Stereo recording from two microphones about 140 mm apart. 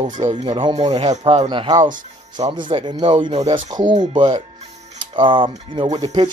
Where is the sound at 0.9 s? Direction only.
50° right (ahead or behind).